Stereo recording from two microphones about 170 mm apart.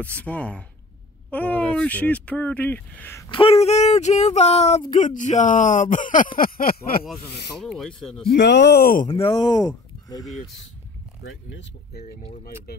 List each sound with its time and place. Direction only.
0.0 s speech: 10° left (ahead or behind)
3.3 s speech: 30° left (ahead or behind); by 6.2 s 50° left (ahead or behind)
6.3 s a sound: 60° left (ahead or behind)
7.5 s speech: centre (ahead or behind)
8.3 s speech: 85° left; by 9.1 s 55° left (ahead or behind)
9.1 s speech: 30° left (ahead or behind)